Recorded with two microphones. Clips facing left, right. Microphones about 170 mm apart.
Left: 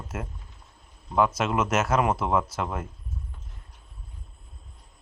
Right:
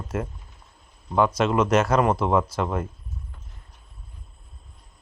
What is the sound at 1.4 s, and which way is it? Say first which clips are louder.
Speech: right 5 dB; 5° left (ahead or behind).